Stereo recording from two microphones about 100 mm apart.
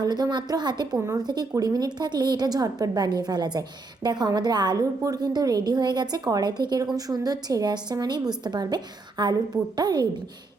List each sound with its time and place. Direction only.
0.0 s a woman's voice: 40° right (ahead or behind)
0.9 s speech: 25° right (ahead or behind)
1.3 s a woman's voice: 40° right (ahead or behind)